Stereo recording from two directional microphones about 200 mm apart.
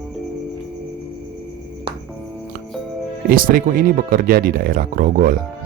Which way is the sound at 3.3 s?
45° right (ahead or behind).